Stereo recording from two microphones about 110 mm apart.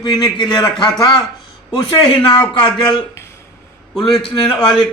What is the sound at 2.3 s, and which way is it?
Speech, 50° left (ahead or behind).